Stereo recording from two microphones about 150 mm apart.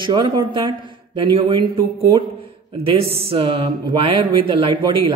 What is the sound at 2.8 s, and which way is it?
Speech, 40° right (ahead or behind).